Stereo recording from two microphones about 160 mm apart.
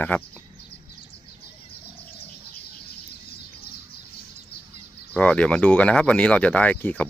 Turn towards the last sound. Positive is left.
turn(degrees=10)  # may be behind; listen again after turning